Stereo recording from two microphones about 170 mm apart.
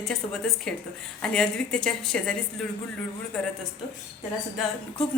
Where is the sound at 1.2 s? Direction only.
5° left (ahead or behind).